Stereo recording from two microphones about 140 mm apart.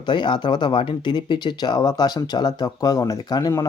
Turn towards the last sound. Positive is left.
turn(degrees=30)  # may be behind; listen again after turning